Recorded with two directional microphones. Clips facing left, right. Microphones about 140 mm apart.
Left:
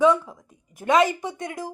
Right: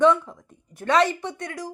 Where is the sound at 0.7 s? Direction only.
15° left (ahead or behind).